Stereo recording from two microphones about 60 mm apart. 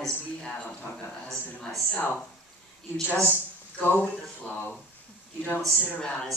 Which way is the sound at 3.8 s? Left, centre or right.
Left.